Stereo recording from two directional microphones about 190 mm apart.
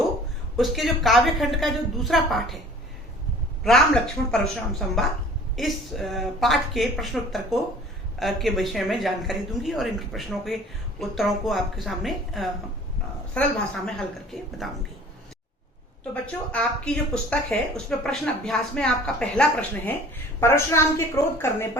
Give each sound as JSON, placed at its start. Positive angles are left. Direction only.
{"t": 0.5, "sound": "speech", "side_deg": 0}
{"t": 3.6, "sound": "speech", "side_deg": 0}
{"t": 16.2, "sound": "a woman's voice", "side_deg": 5}